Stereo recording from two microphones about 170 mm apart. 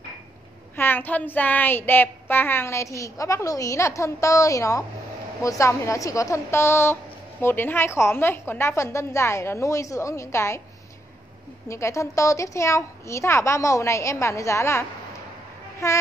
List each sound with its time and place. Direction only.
0.7 s a woman's voice: 10° left (ahead or behind)
11.7 s a woman's voice: 15° left (ahead or behind)